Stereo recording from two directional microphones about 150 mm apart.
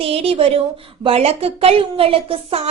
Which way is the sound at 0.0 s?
40° right (ahead or behind).